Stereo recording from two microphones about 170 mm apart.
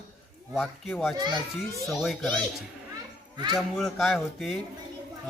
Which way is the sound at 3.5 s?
Centre (ahead or behind).